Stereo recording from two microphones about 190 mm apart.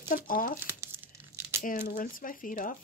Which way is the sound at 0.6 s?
15° right (ahead or behind).